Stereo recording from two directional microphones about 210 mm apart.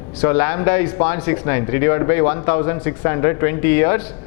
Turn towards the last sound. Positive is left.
turn(degrees=10)  # may be behind; listen again after turning